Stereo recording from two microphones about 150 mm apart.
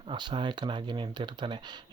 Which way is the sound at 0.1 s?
30° right (ahead or behind).